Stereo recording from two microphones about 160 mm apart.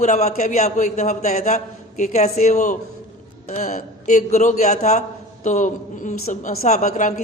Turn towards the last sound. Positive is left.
turn(degrees=50)  # may be behind; listen again after turning